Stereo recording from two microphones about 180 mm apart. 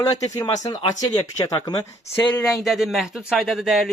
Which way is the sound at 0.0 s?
20° left (ahead or behind).